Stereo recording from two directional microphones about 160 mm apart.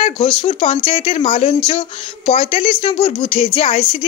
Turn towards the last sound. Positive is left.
turn(degrees=40)  # may be behind; listen again after turning